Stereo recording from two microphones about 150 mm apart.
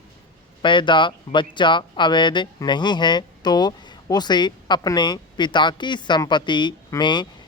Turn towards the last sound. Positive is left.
turn(degrees=30)  # may be behind; listen again after turning